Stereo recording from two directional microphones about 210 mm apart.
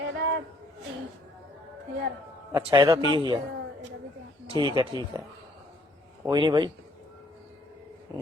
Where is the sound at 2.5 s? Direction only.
20° right (ahead or behind).